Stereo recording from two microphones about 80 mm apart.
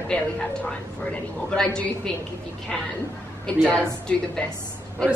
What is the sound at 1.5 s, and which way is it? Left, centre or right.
Speech, centre.